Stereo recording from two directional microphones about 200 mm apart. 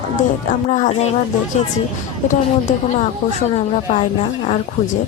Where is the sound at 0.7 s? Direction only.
40° left (ahead or behind).